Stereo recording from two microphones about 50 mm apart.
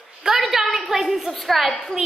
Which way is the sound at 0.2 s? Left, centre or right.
Centre.